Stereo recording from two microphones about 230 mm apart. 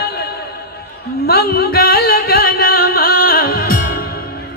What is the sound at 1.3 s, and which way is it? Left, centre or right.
Music, left.